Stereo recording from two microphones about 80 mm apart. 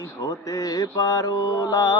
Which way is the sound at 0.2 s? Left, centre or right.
Left.